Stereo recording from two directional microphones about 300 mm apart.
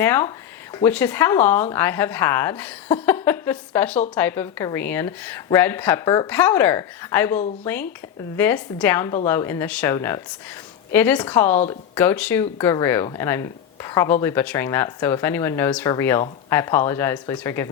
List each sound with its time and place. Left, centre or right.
0.0 s speech: centre
11.5 s a woman's voice: left
11.9 s speech: centre